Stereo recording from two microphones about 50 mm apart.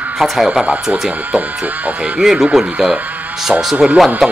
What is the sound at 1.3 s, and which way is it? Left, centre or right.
Speech, right.